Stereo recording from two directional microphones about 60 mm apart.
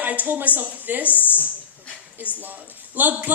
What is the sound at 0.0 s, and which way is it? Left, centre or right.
A man's voice, right.